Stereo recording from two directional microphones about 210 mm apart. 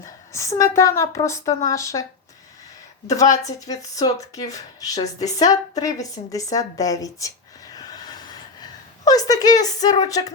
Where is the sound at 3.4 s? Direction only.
15° left (ahead or behind).